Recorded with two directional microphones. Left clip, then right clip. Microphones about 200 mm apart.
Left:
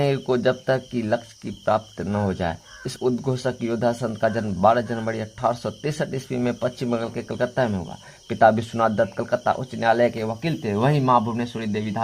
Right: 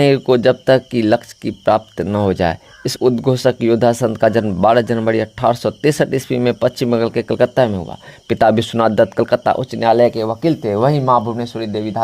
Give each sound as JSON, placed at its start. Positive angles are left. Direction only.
{"t": 0.0, "sound": "speech", "side_deg": -35}